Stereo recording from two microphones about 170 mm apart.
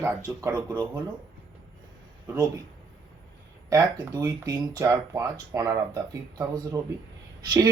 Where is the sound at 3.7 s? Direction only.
15° right (ahead or behind).